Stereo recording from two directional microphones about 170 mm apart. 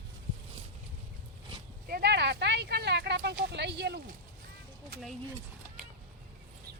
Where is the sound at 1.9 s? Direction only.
75° right (ahead or behind).